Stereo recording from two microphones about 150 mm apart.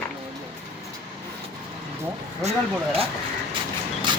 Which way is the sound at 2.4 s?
45° right (ahead or behind).